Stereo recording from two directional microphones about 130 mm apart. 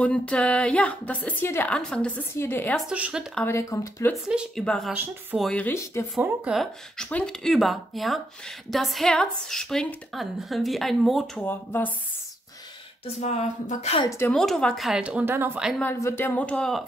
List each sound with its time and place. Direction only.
0.0 s a woman's voice: 10° left (ahead or behind)
2.9 s speech: 10° right (ahead or behind)
3.4 s speech: 20° left (ahead or behind)
4.1 s a woman's voice: 5° right (ahead or behind)
5.7 s speech: 20° left (ahead or behind)
6.5 s speech: 5° left (ahead or behind)
11.3 s a woman's voice: 15° left (ahead or behind)
13.0 s speech: 60° left (ahead or behind)
14.0 s speech: 20° left (ahead or behind)
14.3 s speech: 5° left (ahead or behind); by 15.6 s 15° right (ahead or behind)
15.8 s a woman's voice: 20° left (ahead or behind)